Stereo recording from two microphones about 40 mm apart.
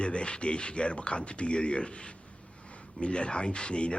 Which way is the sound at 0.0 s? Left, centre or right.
Left.